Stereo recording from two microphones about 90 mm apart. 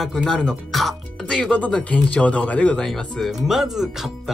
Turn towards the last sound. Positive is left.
turn(degrees=-5)  # may be behind; listen again after turning